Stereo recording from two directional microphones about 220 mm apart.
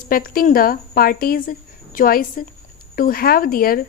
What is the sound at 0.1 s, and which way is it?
Speech, 40° left (ahead or behind).